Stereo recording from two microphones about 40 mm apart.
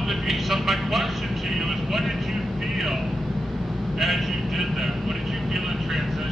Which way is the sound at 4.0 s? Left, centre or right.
Centre.